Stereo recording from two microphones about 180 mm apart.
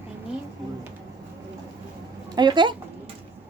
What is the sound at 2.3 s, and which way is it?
Speech, 25° right (ahead or behind).